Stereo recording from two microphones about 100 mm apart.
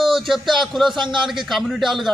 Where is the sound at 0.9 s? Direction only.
50° right (ahead or behind).